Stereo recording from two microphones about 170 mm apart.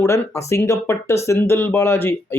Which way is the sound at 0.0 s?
15° left (ahead or behind).